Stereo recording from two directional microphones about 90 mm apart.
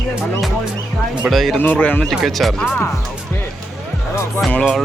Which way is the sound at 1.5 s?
15° left (ahead or behind).